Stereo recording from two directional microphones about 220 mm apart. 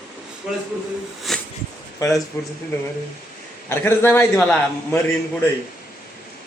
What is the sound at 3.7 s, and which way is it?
A man's voice, 10° left (ahead or behind).